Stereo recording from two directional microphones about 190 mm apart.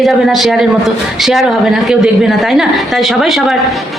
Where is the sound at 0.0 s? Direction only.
Centre (ahead or behind).